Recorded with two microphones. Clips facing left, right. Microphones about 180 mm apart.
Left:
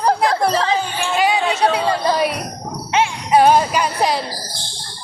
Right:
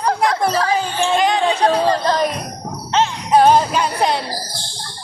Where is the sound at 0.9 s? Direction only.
5° left (ahead or behind).